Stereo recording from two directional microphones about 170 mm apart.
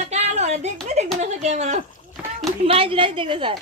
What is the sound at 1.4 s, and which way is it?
A woman's voice, 40° right (ahead or behind).